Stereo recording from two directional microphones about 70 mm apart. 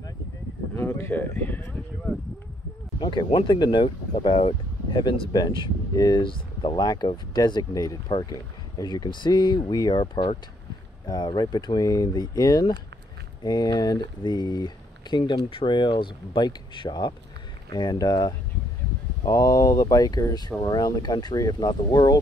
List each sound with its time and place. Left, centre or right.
0.7 s speech: left
3.0 s speech: left
17.6 s speech: left
19.2 s speech: left
20.3 s speech: left